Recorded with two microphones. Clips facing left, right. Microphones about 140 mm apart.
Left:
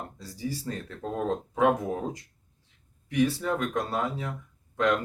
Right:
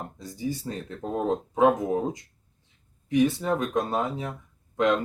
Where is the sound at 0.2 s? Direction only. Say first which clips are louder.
Right 4 dB; 20° right (ahead or behind).